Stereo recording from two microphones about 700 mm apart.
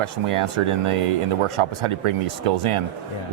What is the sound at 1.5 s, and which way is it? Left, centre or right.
Speech, right.